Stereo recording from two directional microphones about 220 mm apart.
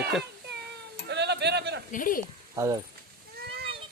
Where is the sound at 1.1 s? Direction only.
50° right (ahead or behind).